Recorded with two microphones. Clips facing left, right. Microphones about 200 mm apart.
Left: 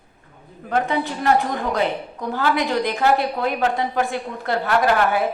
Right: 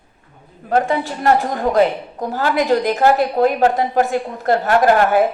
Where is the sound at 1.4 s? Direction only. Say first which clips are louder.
Right 6 dB; 45° right (ahead or behind).